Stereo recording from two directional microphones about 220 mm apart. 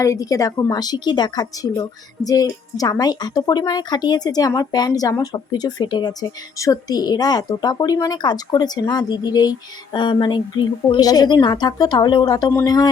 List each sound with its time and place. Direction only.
0.0 s a woman's voice: 15° left (ahead or behind)